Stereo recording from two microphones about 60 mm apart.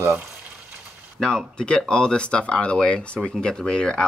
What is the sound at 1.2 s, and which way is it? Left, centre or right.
Speech, centre.